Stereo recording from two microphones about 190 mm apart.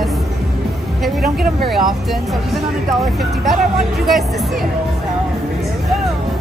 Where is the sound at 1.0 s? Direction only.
Centre (ahead or behind).